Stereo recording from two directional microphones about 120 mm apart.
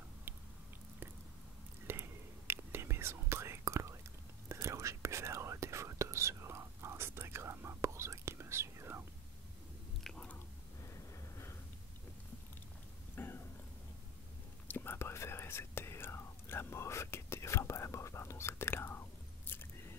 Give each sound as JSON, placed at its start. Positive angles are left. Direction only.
{"t": 0.3, "sound": "chewing", "side_deg": -15}
{"t": 1.9, "sound": "whispering", "side_deg": -20}
{"t": 10.0, "sound": "biting", "side_deg": 10}
{"t": 10.8, "sound": "a sound", "side_deg": 25}
{"t": 13.1, "sound": "a sound", "side_deg": 20}
{"t": 14.7, "sound": "whispering", "side_deg": 20}